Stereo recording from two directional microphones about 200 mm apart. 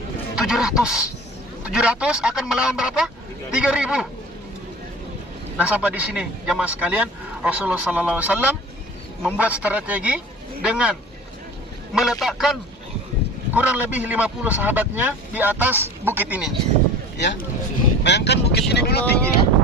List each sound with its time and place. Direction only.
0.3 s speech: 5° right (ahead or behind)
5.5 s speech: 5° right (ahead or behind)
11.9 s speech: centre (ahead or behind)
17.2 s speech: 60° left (ahead or behind)